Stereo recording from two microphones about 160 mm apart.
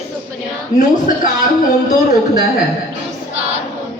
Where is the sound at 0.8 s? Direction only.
60° left (ahead or behind).